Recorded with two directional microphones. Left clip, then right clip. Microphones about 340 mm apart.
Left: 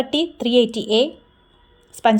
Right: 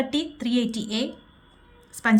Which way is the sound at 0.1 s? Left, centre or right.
Centre.